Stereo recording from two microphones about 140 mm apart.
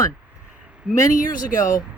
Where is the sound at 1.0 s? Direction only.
70° left (ahead or behind).